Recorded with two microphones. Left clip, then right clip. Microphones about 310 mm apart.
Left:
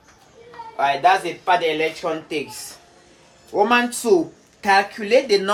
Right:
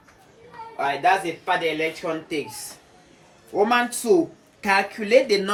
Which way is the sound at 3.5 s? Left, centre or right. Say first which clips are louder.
Left 3 dB; centre.